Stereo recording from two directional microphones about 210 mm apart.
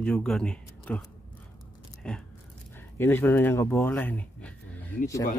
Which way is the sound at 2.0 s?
5° left (ahead or behind).